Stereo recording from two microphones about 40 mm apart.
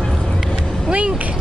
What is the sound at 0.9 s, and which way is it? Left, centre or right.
Vehicle, right.